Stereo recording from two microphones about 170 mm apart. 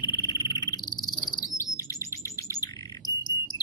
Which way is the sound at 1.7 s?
20° left (ahead or behind).